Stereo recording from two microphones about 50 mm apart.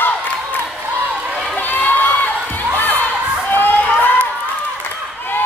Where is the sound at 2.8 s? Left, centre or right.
Left.